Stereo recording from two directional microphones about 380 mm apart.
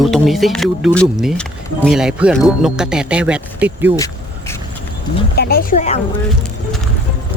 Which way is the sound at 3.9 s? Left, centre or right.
Centre.